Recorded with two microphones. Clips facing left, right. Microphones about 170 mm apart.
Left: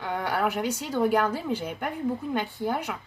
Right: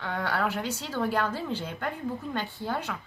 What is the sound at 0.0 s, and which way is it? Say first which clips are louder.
A woman's voice: left 2 dB; 15° left (ahead or behind).